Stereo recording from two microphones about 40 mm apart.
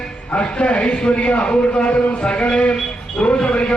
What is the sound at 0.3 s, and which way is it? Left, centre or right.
A man's voice, left.